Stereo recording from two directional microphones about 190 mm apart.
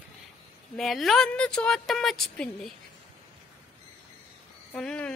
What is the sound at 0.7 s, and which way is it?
A woman's voice, centre (ahead or behind).